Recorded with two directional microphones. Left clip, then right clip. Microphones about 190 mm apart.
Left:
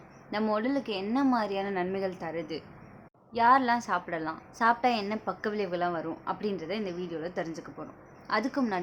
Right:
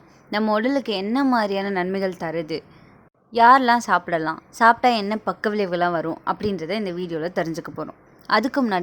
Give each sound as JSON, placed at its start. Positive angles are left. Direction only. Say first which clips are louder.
{"t": 0.3, "sound": "a woman's voice", "louder": "right 8 dB", "side_deg": -40}